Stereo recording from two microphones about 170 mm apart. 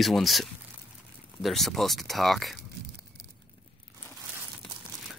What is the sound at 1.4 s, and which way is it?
Speech, centre (ahead or behind).